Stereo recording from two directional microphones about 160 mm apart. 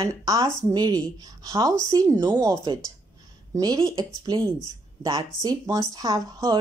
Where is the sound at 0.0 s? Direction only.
20° right (ahead or behind).